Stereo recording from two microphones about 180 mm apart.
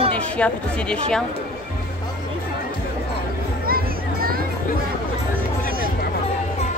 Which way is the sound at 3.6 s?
55° right (ahead or behind).